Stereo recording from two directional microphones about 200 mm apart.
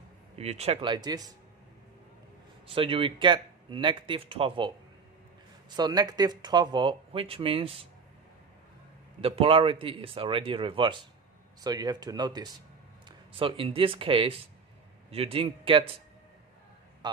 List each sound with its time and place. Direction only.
0.4 s speech: 30° right (ahead or behind)
2.6 s speech: 25° right (ahead or behind)
9.2 s speech: 30° right (ahead or behind)
17.0 s a sound: 20° right (ahead or behind)